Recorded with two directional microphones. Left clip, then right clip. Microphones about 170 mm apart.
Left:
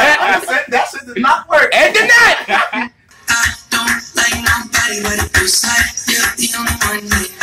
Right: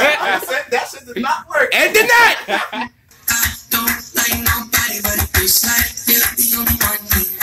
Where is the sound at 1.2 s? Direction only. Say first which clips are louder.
Left 7 dB; 50° right (ahead or behind).